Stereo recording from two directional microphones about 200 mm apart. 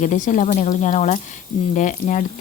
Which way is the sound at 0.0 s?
40° left (ahead or behind).